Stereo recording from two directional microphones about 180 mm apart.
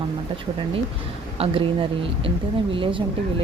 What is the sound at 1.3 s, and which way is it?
Speech, 30° right (ahead or behind).